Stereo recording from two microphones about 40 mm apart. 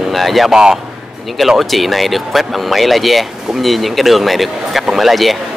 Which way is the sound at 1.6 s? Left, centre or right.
Centre.